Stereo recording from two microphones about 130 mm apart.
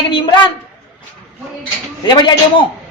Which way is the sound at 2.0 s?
35° left (ahead or behind).